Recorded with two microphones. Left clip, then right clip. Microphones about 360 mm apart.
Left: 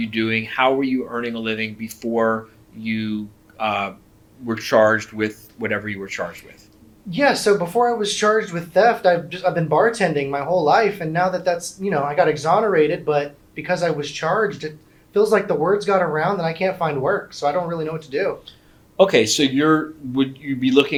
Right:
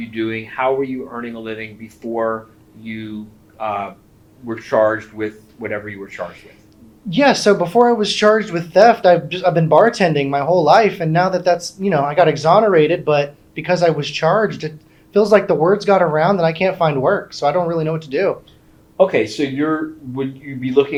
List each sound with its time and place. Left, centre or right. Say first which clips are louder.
0.1 s speech: even; left
7.1 s speech: right 4 dB; right
18.9 s speech: even; left